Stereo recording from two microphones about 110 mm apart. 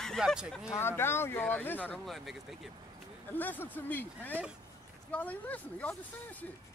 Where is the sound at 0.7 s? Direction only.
20° left (ahead or behind).